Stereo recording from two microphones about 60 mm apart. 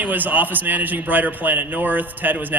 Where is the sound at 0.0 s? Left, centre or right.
Right.